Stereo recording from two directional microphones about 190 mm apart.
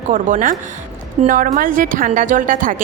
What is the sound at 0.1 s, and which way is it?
A woman's voice, 45° right (ahead or behind).